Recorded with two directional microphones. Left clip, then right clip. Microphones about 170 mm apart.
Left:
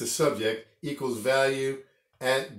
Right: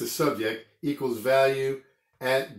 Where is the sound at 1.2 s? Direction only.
20° right (ahead or behind).